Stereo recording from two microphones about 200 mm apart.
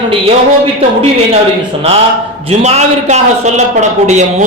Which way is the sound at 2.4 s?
30° right (ahead or behind).